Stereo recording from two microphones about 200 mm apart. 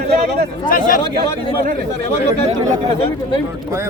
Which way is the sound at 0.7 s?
45° left (ahead or behind).